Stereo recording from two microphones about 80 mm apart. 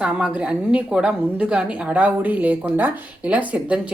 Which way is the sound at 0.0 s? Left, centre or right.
Centre.